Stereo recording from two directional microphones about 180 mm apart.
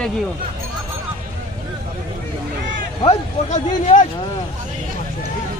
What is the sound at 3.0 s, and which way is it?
Speech, 40° left (ahead or behind).